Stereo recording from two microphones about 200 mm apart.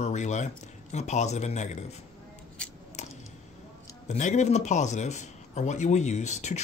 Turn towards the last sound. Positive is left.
turn(degrees=35)  # may be behind; listen again after turning